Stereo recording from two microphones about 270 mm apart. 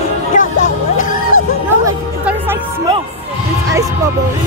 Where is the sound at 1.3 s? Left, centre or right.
Left.